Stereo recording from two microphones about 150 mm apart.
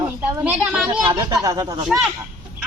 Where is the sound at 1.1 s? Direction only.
25° right (ahead or behind).